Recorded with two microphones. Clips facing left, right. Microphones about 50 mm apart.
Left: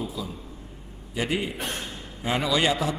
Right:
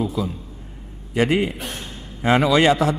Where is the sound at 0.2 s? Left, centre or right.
Right.